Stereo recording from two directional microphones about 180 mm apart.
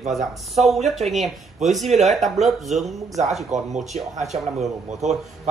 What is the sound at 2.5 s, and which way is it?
Speech, centre (ahead or behind).